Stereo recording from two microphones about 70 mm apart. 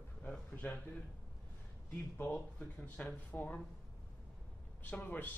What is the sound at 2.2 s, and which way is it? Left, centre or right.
A man's voice, centre.